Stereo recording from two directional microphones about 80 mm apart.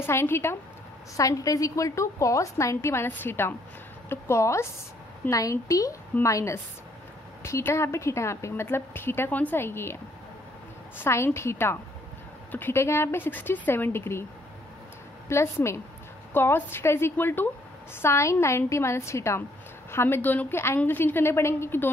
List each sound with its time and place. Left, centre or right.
0.0 s a woman's voice: left
1.1 s a woman's voice: left
11.0 s a woman's voice: left
15.2 s a woman's voice: left